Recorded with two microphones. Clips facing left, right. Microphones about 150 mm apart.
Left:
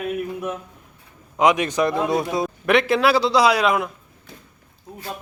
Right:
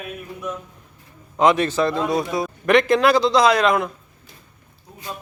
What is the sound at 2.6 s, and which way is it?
A man's voice, 5° left (ahead or behind).